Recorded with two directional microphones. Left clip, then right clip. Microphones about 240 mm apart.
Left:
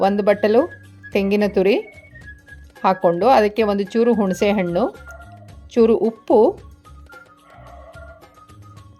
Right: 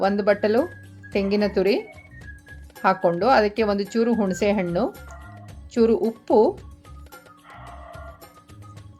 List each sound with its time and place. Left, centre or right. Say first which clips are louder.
0.0 s speech: left 4 dB; centre
1.9 s music: left 3 dB; centre
2.8 s speech: left 4 dB; centre
7.6 s music: even; centre